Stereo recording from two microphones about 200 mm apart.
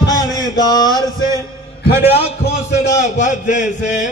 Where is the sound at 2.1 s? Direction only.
30° left (ahead or behind).